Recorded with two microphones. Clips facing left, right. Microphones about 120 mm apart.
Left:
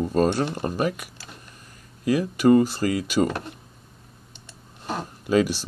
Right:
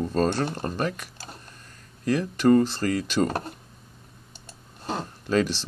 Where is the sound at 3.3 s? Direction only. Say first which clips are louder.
Right 1 dB; 40° right (ahead or behind).